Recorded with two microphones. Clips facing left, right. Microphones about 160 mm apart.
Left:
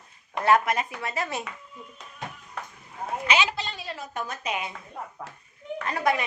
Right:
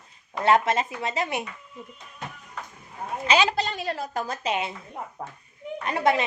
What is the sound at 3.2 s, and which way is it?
A woman's voice, 40° right (ahead or behind).